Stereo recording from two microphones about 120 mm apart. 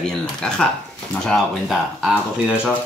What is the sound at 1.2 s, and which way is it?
Speech, centre (ahead or behind).